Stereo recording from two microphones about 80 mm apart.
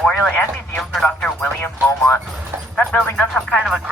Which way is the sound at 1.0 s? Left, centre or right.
Centre.